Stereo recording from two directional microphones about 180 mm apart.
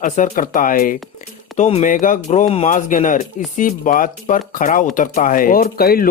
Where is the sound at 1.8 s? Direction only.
45° left (ahead or behind).